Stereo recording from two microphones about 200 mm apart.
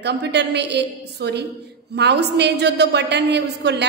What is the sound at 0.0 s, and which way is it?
A woman's voice, 60° right (ahead or behind).